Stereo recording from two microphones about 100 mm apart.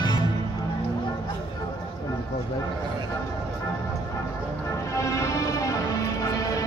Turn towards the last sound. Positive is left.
turn(degrees=35)  # may be behind; listen again after turning